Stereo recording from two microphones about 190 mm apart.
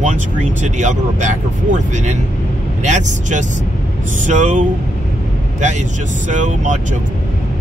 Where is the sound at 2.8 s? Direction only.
40° right (ahead or behind).